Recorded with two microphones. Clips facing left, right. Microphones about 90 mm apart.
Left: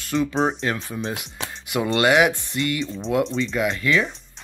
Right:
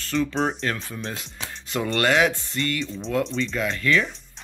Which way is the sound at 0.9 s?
15° left (ahead or behind).